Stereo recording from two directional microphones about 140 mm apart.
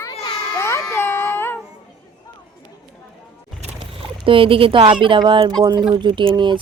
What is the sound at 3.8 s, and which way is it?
Speech, 40° right (ahead or behind).